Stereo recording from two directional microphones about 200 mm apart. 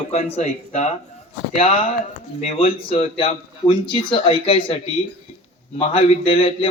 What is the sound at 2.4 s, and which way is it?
Speech, 30° left (ahead or behind).